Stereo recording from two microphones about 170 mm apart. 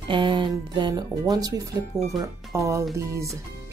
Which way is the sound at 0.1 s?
30° right (ahead or behind).